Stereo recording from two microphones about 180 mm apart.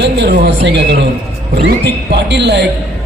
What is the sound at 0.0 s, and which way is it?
Speech, 70° right (ahead or behind).